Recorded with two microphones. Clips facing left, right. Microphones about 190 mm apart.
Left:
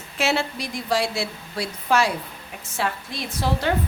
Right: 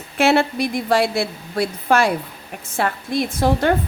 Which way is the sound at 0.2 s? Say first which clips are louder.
Right 8 dB; 55° right (ahead or behind).